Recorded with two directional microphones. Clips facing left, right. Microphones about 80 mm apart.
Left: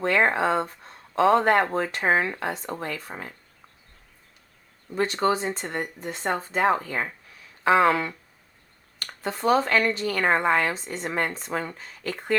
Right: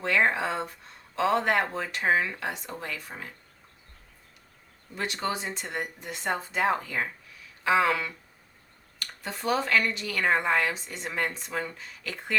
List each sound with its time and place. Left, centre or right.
0.0 s speech: left
4.9 s speech: left